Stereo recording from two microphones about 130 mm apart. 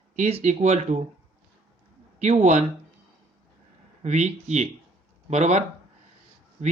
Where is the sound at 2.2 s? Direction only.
60° right (ahead or behind).